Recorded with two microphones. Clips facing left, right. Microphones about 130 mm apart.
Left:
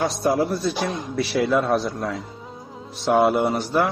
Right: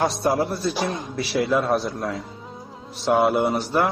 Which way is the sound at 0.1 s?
Centre (ahead or behind).